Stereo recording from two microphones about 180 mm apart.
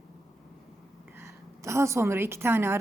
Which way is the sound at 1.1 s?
15° right (ahead or behind).